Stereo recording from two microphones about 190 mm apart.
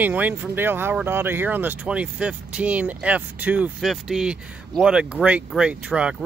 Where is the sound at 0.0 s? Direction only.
10° right (ahead or behind).